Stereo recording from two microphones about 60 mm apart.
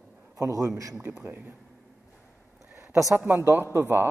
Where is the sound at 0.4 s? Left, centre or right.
Right.